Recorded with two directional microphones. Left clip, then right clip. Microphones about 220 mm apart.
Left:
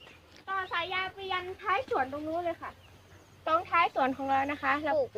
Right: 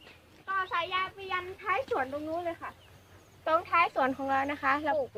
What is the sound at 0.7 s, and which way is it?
A woman's voice, 10° right (ahead or behind).